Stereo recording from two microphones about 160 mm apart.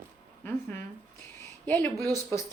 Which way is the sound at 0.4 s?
10° left (ahead or behind).